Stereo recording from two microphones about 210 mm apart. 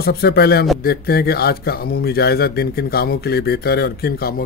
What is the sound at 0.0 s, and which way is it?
Speech, 50° left (ahead or behind).